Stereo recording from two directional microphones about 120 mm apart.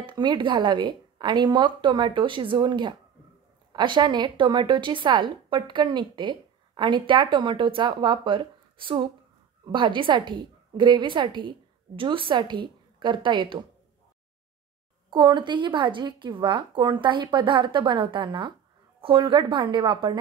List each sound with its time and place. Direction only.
0.0 s a woman's voice: 40° right (ahead or behind)
15.0 s a woman's voice: 40° right (ahead or behind)